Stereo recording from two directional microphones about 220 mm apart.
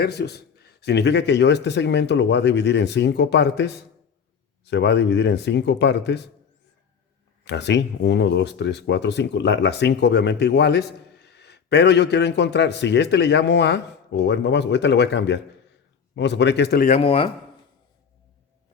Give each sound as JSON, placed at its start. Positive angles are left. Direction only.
{"t": 0.0, "sound": "speech", "side_deg": 45}
{"t": 7.4, "sound": "speech", "side_deg": 50}
{"t": 16.8, "sound": "speech", "side_deg": 30}